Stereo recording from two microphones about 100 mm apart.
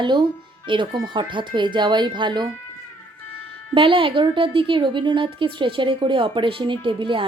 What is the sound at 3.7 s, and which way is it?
A woman's voice, 60° right (ahead or behind).